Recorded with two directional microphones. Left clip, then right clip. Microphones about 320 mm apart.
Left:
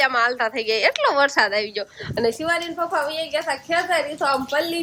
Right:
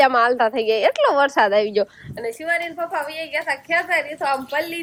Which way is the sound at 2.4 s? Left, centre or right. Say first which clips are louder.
Even; centre.